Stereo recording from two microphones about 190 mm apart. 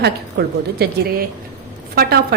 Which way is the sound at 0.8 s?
50° right (ahead or behind).